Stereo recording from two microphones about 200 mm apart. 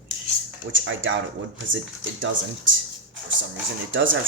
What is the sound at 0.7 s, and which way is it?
Speech, 70° right (ahead or behind).